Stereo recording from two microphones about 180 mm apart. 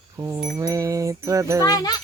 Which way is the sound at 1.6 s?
20° left (ahead or behind).